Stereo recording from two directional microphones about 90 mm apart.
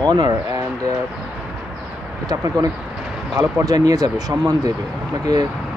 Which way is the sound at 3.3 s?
40° right (ahead or behind).